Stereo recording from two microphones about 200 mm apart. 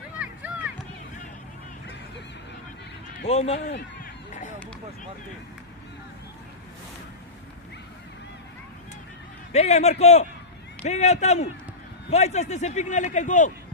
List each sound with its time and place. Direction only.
0.2 s music: 5° right (ahead or behind)
3.2 s a man's voice: 30° left (ahead or behind)
9.5 s a man's voice: 35° left (ahead or behind)